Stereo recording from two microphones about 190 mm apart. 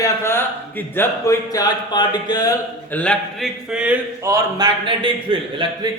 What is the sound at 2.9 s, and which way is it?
Speech, 5° left (ahead or behind).